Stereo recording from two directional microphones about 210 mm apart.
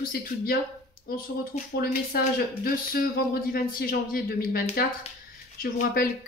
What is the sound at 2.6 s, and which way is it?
Speech, 45° left (ahead or behind).